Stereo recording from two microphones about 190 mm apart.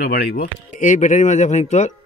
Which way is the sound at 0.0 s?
55° left (ahead or behind).